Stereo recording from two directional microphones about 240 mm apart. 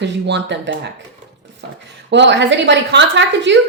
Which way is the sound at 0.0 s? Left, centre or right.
Right.